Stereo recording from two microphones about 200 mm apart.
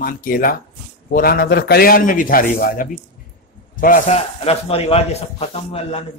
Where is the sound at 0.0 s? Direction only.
45° left (ahead or behind).